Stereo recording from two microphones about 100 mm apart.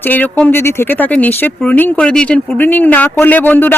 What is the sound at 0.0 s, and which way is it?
Speech, 15° left (ahead or behind).